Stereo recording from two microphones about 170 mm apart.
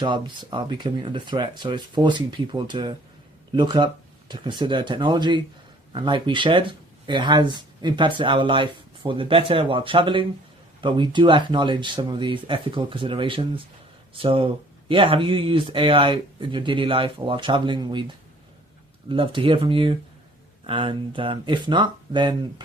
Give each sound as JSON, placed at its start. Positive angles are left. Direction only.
{"t": 0.0, "sound": "speech", "side_deg": -25}
{"t": 19.0, "sound": "speech", "side_deg": -30}